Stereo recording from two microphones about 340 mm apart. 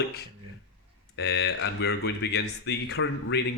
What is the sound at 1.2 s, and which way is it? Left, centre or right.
Speech, left.